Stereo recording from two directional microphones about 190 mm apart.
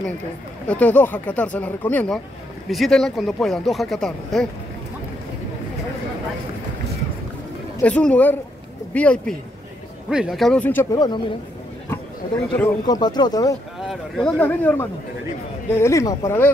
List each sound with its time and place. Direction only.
0.7 s speech: 10° left (ahead or behind)
7.8 s speech: 5° left (ahead or behind)
11.9 s a sound: 5° left (ahead or behind)
12.8 s speech: 20° left (ahead or behind)
13.7 s speech: centre (ahead or behind)